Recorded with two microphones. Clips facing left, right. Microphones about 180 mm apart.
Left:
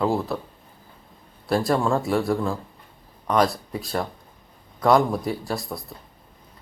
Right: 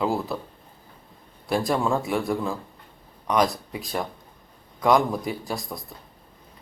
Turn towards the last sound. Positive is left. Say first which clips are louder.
# left 2 dB
turn(degrees=0)  # may be behind; listen again after turning